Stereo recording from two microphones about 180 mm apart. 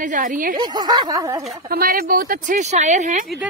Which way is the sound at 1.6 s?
55° right (ahead or behind).